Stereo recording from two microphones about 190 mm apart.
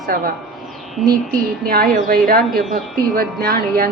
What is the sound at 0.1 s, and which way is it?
Speech, 50° right (ahead or behind).